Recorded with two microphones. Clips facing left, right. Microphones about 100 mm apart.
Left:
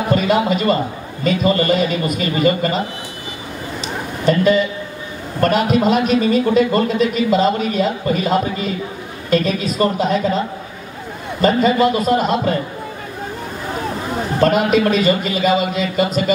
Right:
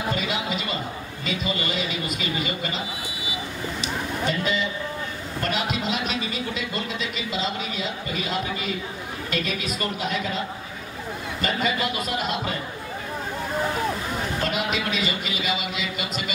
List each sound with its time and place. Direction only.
0.1 s a man's voice: 50° left (ahead or behind)
4.3 s a man's voice: 50° left (ahead or behind)
11.4 s a man's voice: 35° left (ahead or behind)
14.4 s a man's voice: 45° left (ahead or behind)